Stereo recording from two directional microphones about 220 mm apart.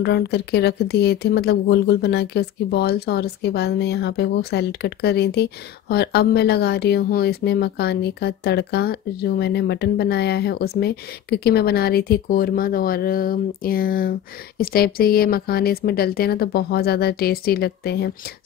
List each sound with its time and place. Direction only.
0.0 s speech: 50° left (ahead or behind)